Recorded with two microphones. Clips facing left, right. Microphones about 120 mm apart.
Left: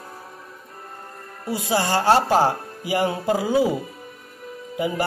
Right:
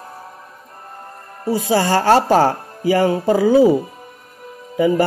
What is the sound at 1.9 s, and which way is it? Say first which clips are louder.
Speech: right 3 dB; 55° right (ahead or behind).